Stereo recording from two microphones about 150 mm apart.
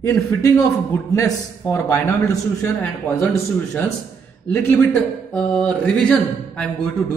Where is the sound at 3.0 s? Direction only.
15° left (ahead or behind).